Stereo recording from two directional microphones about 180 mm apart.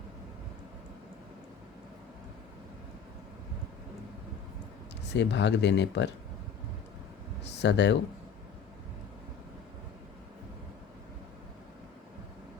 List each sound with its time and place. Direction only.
5.1 s speech: 75° left (ahead or behind)
7.4 s speech: 70° left (ahead or behind)